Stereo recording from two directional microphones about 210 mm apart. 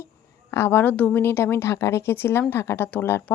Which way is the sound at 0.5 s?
10° left (ahead or behind).